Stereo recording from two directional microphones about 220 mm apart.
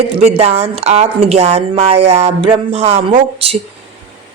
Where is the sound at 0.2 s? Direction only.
30° right (ahead or behind).